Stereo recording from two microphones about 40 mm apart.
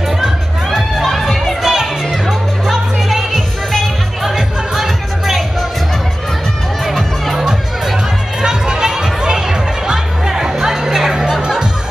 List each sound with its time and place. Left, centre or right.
0.9 s music: centre
3.7 s music: centre
6.9 s music: centre
8.4 s music: centre